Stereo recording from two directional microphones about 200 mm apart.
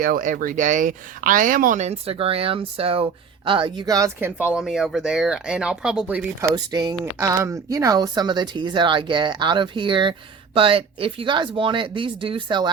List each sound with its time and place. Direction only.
0.0 s speech: 45° right (ahead or behind); by 4.4 s 15° right (ahead or behind)
4.5 s speech: centre (ahead or behind)
6.5 s speech: 20° right (ahead or behind)